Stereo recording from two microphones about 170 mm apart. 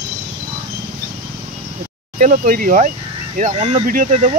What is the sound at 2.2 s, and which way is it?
Speech, 50° right (ahead or behind).